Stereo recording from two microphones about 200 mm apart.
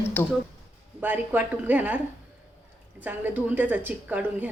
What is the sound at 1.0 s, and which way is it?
A woman's voice, 10° right (ahead or behind).